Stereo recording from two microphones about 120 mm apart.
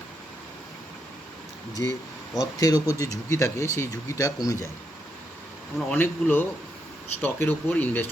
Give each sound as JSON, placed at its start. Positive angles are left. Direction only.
{"t": 1.8, "sound": "speech", "side_deg": 25}
{"t": 5.9, "sound": "speech", "side_deg": 15}